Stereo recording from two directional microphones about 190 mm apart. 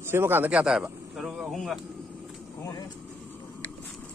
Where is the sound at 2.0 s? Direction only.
Centre (ahead or behind).